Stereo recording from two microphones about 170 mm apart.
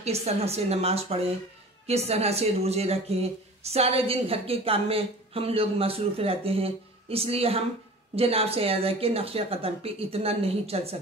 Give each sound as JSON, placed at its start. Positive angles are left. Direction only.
{"t": 0.0, "sound": "speech", "side_deg": -40}